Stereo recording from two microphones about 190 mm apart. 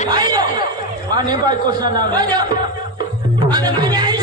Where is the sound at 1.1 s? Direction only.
20° right (ahead or behind).